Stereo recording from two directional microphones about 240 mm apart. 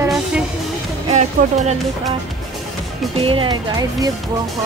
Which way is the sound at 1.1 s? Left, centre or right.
Right.